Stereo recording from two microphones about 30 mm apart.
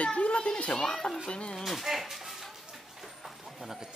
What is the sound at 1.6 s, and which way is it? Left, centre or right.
Speech, centre.